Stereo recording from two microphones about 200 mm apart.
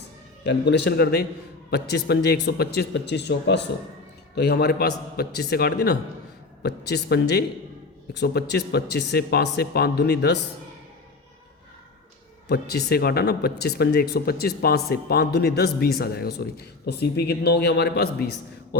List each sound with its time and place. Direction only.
0.4 s speech: 60° left (ahead or behind)
12.5 s speech: 55° left (ahead or behind)